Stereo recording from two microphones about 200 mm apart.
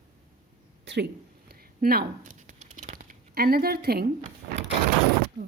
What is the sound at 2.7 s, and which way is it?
Speech, 40° right (ahead or behind).